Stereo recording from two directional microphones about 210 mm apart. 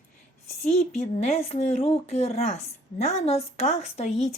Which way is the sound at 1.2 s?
30° left (ahead or behind).